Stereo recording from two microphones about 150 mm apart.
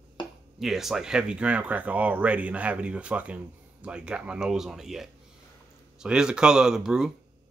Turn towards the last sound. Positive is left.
turn(degrees=-5)  # may be behind; listen again after turning